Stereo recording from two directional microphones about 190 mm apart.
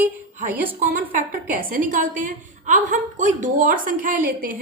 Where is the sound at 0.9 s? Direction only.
45° right (ahead or behind).